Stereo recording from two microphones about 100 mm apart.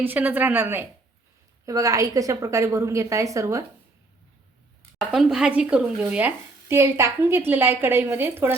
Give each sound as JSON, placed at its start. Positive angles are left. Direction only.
{"t": 0.0, "sound": "speech", "side_deg": -20}
{"t": 1.6, "sound": "a woman's voice", "side_deg": -35}
{"t": 4.9, "sound": "a woman's voice", "side_deg": -5}